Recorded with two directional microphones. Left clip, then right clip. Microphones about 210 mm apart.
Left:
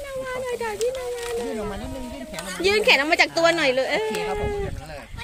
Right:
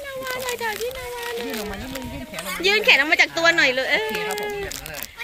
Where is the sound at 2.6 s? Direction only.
10° left (ahead or behind).